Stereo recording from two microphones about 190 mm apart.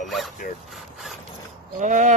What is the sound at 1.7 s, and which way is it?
Speech, 40° right (ahead or behind).